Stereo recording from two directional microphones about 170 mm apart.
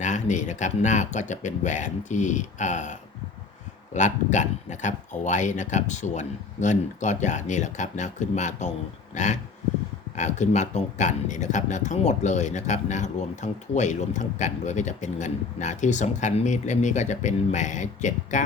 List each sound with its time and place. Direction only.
0.0 s speech: 45° left (ahead or behind)